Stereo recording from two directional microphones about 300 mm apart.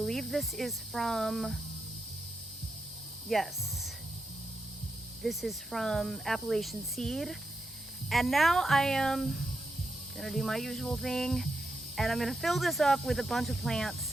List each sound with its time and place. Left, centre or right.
0.0 s speech: centre
3.2 s speech: centre
5.2 s speech: centre